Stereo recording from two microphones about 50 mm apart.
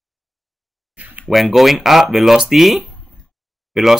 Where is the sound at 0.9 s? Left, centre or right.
Right.